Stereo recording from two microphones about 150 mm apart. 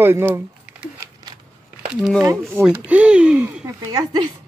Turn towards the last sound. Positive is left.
turn(degrees=-25)  # may be behind; listen again after turning